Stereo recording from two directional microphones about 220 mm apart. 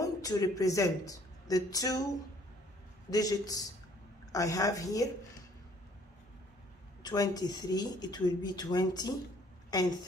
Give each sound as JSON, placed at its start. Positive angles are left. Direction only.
{"t": 0.0, "sound": "speech", "side_deg": 15}
{"t": 3.1, "sound": "a woman's voice", "side_deg": 15}
{"t": 7.0, "sound": "a woman's voice", "side_deg": 20}